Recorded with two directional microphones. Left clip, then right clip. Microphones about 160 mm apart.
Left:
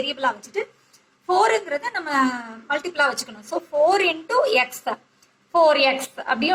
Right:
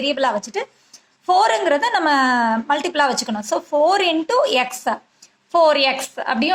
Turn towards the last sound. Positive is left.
turn(degrees=-20)  # may be behind; listen again after turning